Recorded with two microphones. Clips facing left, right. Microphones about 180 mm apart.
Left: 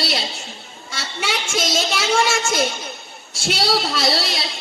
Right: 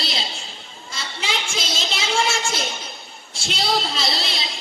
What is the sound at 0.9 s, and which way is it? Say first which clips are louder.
A woman's voice: left 3 dB; 70° left (ahead or behind).